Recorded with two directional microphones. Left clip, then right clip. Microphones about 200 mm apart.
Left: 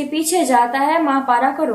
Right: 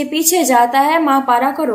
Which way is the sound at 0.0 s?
40° right (ahead or behind).